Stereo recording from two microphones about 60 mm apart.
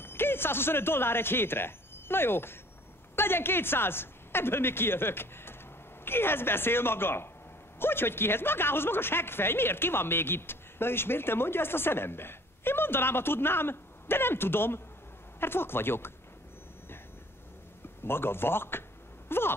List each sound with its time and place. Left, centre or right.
0.0 s speech: left
18.0 s speech: left